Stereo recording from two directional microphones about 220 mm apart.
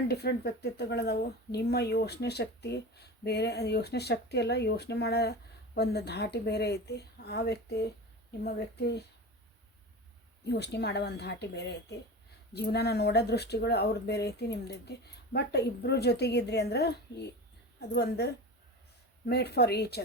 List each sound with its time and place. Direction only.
0.1 s speech: 45° left (ahead or behind)
10.5 s speech: 50° left (ahead or behind)